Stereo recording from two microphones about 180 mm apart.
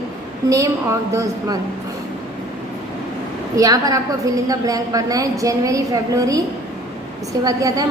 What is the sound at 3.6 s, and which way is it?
A woman's voice, 20° right (ahead or behind).